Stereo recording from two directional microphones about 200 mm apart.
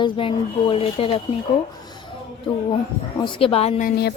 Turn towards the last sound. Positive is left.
turn(degrees=55)  # may be behind; listen again after turning